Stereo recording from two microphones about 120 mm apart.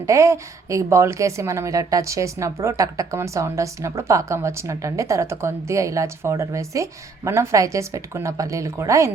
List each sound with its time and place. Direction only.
0.0 s a woman's voice: 25° right (ahead or behind)